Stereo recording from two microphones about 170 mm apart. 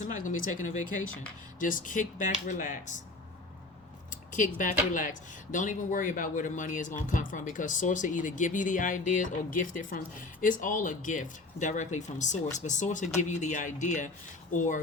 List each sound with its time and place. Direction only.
0.0 s a man's voice: 50° left (ahead or behind)
4.1 s a sound: 50° left (ahead or behind)
4.9 s a man's voice: 50° left (ahead or behind)